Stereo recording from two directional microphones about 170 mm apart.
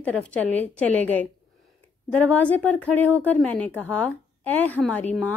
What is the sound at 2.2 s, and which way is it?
Speech, 10° left (ahead or behind).